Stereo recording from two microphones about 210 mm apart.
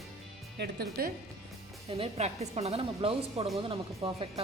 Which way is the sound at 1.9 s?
25° right (ahead or behind).